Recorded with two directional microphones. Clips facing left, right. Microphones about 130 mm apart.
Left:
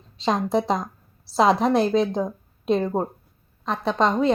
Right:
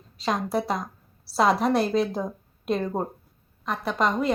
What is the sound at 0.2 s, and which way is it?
Speech, 25° left (ahead or behind).